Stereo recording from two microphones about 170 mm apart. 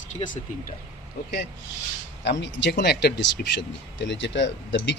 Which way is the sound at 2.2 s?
90° left.